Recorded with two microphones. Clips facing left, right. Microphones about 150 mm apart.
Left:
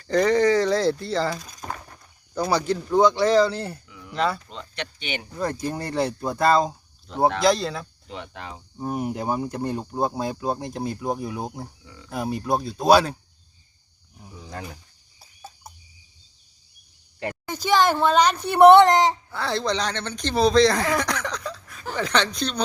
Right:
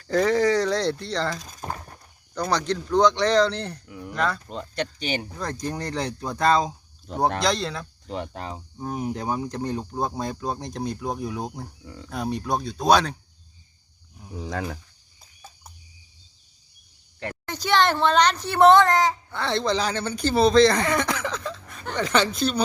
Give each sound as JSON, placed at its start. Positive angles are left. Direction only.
{"t": 0.0, "sound": "speech", "side_deg": 0}
{"t": 3.8, "sound": "a sound", "side_deg": -50}
{"t": 4.4, "sound": "speech", "side_deg": -45}
{"t": 5.4, "sound": "speech", "side_deg": 10}
{"t": 8.0, "sound": "speech", "side_deg": -40}
{"t": 8.8, "sound": "speech", "side_deg": 5}
{"t": 14.3, "sound": "speech", "side_deg": -90}
{"t": 15.2, "sound": "cricket", "side_deg": 10}
{"t": 17.2, "sound": "a woman's voice", "side_deg": 10}
{"t": 19.3, "sound": "speech", "side_deg": 0}